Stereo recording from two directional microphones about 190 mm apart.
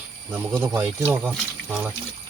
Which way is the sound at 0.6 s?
15° right (ahead or behind).